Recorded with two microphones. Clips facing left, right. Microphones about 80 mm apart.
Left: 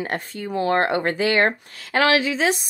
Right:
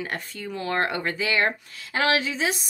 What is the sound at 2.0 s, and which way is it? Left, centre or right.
Speech, left.